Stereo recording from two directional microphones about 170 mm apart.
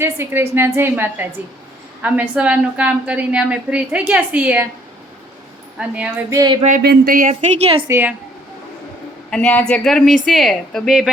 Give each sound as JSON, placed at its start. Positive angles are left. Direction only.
{"t": 0.0, "sound": "a woman's voice", "side_deg": -15}
{"t": 6.0, "sound": "a woman's voice", "side_deg": -10}
{"t": 6.6, "sound": "speech", "side_deg": -50}
{"t": 6.8, "sound": "speech", "side_deg": -60}
{"t": 7.6, "sound": "a woman's voice", "side_deg": -30}
{"t": 7.9, "sound": "a woman's voice", "side_deg": -15}
{"t": 9.3, "sound": "a woman's voice", "side_deg": 5}